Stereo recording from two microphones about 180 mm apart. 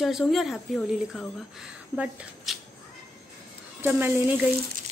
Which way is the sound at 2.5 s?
Centre (ahead or behind).